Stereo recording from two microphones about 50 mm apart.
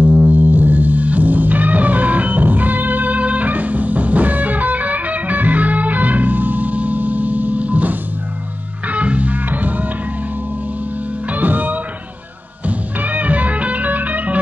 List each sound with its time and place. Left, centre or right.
0.0 s music: right
11.2 s music: right